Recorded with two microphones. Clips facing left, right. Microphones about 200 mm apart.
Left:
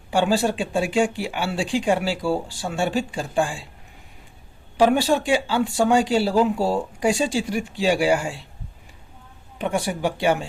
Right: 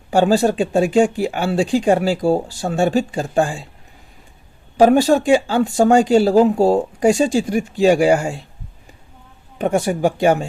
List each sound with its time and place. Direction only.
0.1 s speech: 40° right (ahead or behind)
4.8 s speech: 45° right (ahead or behind)
9.6 s speech: 45° right (ahead or behind)